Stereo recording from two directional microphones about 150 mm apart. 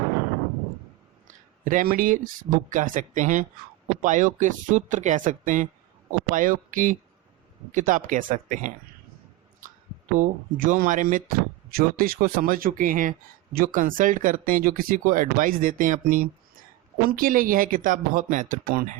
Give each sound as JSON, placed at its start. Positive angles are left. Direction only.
{"t": 1.3, "sound": "speech", "side_deg": -60}
{"t": 10.2, "sound": "speech", "side_deg": -60}